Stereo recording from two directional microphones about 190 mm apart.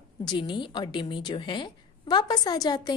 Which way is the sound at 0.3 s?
25° left (ahead or behind).